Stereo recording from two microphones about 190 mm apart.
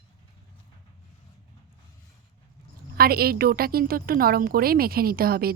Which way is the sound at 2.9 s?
55° right (ahead or behind).